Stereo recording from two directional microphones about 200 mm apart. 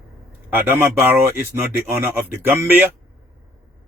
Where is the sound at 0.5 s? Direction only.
10° right (ahead or behind).